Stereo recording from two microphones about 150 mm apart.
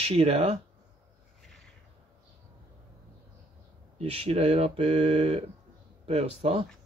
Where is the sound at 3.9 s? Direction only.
40° right (ahead or behind).